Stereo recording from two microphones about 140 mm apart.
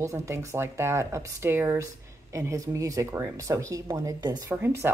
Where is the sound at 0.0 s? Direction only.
20° right (ahead or behind).